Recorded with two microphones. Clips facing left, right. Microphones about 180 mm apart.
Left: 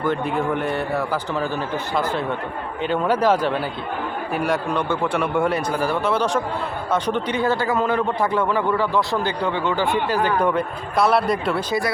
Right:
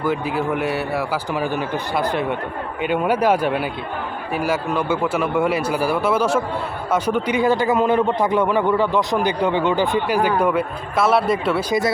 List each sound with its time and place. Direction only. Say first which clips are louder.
0.0 s a man's voice: even; 5° right (ahead or behind)